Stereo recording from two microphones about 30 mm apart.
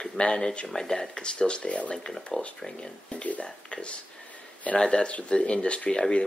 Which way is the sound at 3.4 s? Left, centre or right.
Left.